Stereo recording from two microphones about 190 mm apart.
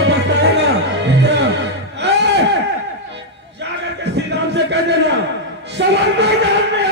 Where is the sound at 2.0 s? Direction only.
65° right (ahead or behind).